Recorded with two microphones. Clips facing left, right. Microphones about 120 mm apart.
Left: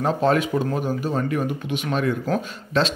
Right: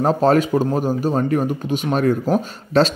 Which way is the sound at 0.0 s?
35° right (ahead or behind).